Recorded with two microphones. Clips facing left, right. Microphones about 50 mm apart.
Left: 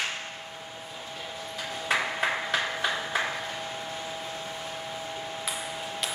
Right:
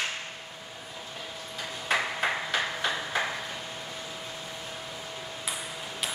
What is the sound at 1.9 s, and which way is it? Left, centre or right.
Ping, centre.